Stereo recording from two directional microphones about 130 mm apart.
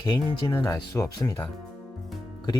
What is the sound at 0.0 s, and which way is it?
Speech, 35° left (ahead or behind).